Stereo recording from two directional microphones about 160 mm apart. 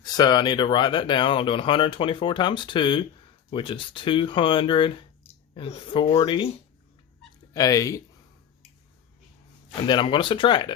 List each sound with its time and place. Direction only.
0.0 s speech: 25° left (ahead or behind)
7.5 s speech: 20° left (ahead or behind)
9.8 s speech: 30° left (ahead or behind)